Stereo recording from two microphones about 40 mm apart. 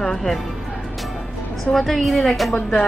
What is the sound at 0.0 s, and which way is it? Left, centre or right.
Music, centre.